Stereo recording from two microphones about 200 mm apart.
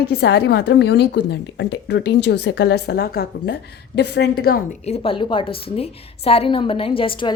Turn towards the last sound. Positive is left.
turn(degrees=25)  # may be behind; listen again after turning